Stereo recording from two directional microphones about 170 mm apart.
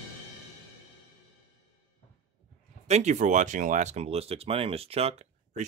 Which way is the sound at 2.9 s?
40° right (ahead or behind).